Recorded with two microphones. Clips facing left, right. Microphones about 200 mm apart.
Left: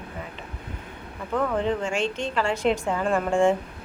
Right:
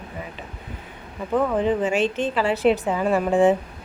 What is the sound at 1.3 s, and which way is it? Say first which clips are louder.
Speech: right 4 dB; 15° right (ahead or behind).